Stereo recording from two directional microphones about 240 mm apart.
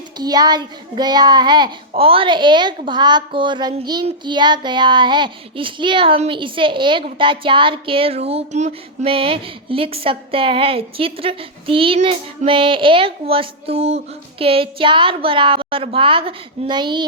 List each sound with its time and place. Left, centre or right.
0.2 s a child's voice: centre